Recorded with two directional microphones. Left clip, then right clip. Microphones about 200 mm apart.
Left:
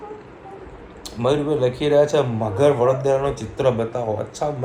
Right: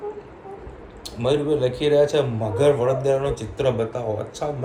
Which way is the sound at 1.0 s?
Centre (ahead or behind).